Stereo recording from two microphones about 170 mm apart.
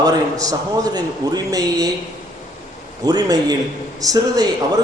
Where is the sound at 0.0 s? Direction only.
20° right (ahead or behind).